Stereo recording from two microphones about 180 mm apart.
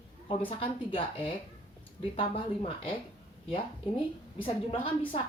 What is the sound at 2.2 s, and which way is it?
Speech, 30° left (ahead or behind).